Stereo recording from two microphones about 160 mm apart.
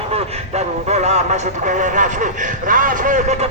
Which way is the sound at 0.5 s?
45° right (ahead or behind).